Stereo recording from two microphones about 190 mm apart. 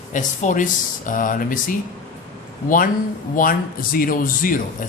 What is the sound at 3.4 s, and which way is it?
Speech, 50° left (ahead or behind).